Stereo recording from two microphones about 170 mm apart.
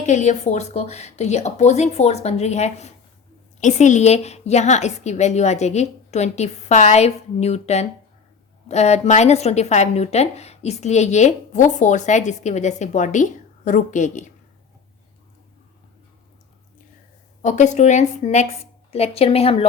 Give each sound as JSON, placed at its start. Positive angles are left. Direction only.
{"t": 0.0, "sound": "a woman's voice", "side_deg": 45}
{"t": 17.4, "sound": "a woman's voice", "side_deg": 45}